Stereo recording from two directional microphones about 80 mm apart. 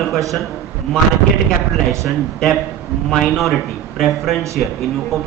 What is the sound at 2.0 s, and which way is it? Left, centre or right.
A man's voice, centre.